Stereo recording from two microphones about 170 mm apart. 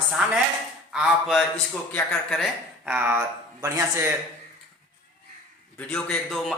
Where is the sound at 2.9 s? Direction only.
15° right (ahead or behind).